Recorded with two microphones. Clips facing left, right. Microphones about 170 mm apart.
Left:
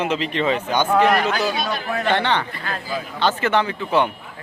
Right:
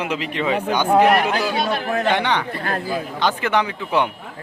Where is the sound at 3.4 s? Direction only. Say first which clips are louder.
Left 1 dB; 10° right (ahead or behind).